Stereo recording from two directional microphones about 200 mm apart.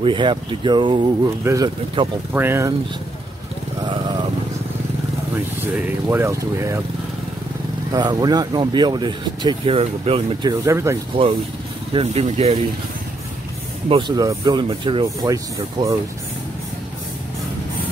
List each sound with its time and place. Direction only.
0.0 s speech: 25° right (ahead or behind)
3.8 s vehicle: 20° right (ahead or behind)
5.6 s speech: 10° right (ahead or behind)
7.9 s speech: 20° right (ahead or behind)
11.9 s speech: 30° right (ahead or behind)
13.8 s speech: 25° right (ahead or behind)